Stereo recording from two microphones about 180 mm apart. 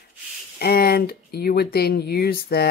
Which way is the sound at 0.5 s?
60° left (ahead or behind).